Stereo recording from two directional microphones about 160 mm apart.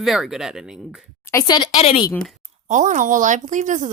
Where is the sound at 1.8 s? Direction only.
40° left (ahead or behind).